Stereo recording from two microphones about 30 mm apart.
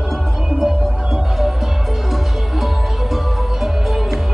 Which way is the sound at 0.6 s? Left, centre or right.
Centre.